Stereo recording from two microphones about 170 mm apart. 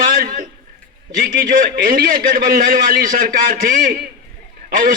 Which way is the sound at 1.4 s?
55° right (ahead or behind).